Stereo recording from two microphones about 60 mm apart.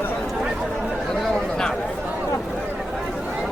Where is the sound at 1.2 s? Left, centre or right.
Centre.